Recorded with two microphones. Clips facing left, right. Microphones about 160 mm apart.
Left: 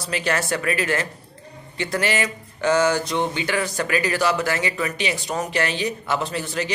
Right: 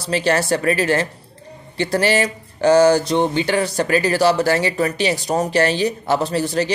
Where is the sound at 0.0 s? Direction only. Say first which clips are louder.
Right 6 dB; 30° right (ahead or behind).